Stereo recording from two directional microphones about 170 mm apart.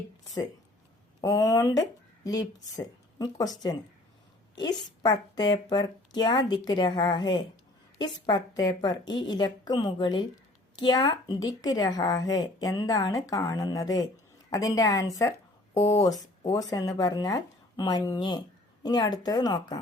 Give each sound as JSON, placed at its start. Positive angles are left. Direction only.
{"t": 1.2, "sound": "a woman's voice", "side_deg": 20}
{"t": 4.5, "sound": "a woman's voice", "side_deg": 25}